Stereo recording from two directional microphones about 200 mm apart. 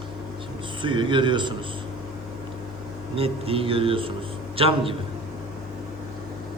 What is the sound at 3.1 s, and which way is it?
Mantra, 30° right (ahead or behind).